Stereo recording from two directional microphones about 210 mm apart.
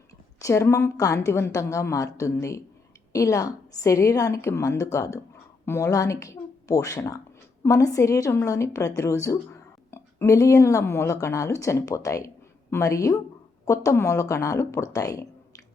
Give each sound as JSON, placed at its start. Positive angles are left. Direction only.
{"t": 0.3, "sound": "speech", "side_deg": 15}